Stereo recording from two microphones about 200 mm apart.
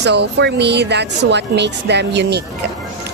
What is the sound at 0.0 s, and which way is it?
A woman's voice, 55° right (ahead or behind).